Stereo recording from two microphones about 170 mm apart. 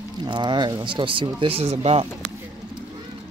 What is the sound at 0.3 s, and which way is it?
Speech, 25° right (ahead or behind).